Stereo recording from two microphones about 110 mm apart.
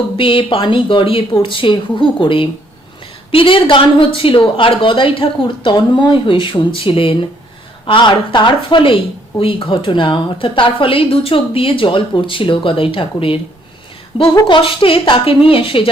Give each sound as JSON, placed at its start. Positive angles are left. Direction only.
{"t": 0.2, "sound": "a woman's voice", "side_deg": 55}
{"t": 14.3, "sound": "a woman's voice", "side_deg": 45}